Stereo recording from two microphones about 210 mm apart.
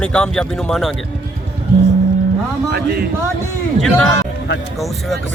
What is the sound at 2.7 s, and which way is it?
Speech, 50° right (ahead or behind).